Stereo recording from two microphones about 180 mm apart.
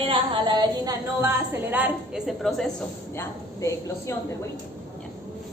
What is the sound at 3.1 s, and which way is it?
A woman's voice, 15° left (ahead or behind).